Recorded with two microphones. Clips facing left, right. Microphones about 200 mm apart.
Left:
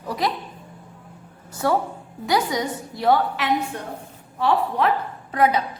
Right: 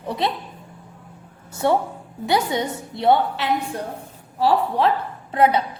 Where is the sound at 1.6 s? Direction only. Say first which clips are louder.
Right 2 dB; 25° right (ahead or behind).